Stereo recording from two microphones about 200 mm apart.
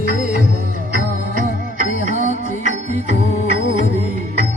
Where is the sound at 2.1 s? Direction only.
35° right (ahead or behind).